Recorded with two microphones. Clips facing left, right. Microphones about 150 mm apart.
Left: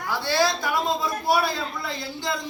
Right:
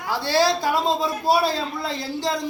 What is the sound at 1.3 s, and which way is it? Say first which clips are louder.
A man's voice: right 3 dB; 35° right (ahead or behind).